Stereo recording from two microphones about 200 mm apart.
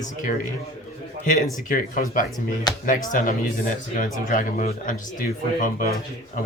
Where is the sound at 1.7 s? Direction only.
45° left (ahead or behind).